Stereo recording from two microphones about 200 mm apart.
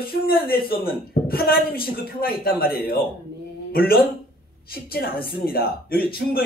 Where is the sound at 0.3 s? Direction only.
50° left (ahead or behind).